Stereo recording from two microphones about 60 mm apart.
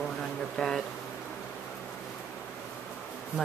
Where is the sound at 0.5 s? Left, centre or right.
Centre.